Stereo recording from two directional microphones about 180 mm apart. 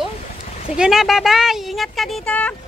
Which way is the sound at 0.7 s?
Centre (ahead or behind).